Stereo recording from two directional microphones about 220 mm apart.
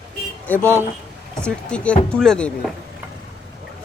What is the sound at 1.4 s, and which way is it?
Speech, 5° left (ahead or behind).